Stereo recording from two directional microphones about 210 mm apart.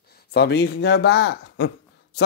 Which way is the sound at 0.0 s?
50° left (ahead or behind).